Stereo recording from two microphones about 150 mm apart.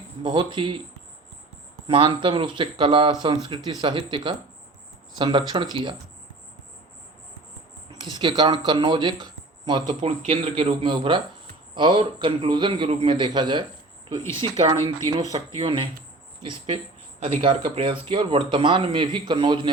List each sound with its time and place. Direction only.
0.2 s a man's voice: 35° right (ahead or behind)
1.9 s a man's voice: 35° right (ahead or behind)
8.1 s speech: 30° right (ahead or behind)
10.0 s a man's voice: 45° right (ahead or behind)
10.8 s a man's voice: 35° right (ahead or behind)